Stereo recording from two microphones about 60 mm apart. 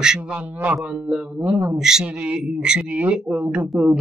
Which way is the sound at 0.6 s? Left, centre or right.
Right.